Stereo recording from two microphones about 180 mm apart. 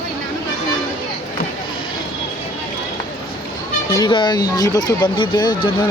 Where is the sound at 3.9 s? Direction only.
25° left (ahead or behind).